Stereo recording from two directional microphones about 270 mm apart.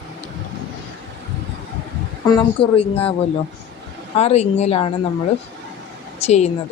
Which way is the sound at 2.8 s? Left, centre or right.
Left.